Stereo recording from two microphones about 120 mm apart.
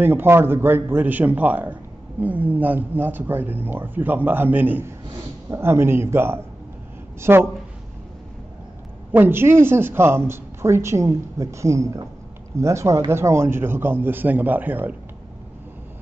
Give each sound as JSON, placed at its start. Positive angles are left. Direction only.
{"t": 0.0, "sound": "a man's voice", "side_deg": -20}
{"t": 9.1, "sound": "a man's voice", "side_deg": -15}